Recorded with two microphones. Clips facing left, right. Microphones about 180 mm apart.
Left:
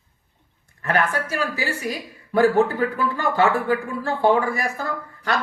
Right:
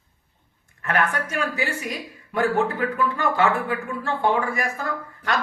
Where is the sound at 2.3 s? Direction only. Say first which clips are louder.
Left 5 dB; 35° left (ahead or behind).